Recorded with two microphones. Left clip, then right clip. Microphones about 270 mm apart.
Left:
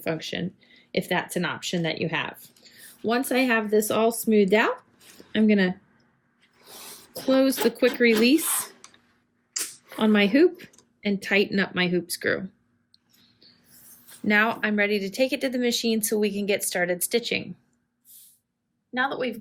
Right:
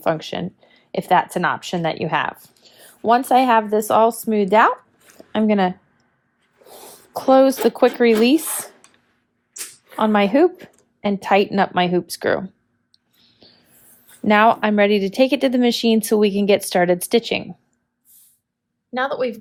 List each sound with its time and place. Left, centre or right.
0.2 s speech: centre
7.1 s speech: centre
10.0 s speech: centre
13.2 s a sound: centre
14.3 s speech: centre
18.9 s speech: centre